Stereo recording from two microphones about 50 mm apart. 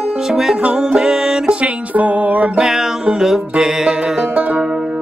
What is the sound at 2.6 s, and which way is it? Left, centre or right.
Music, centre.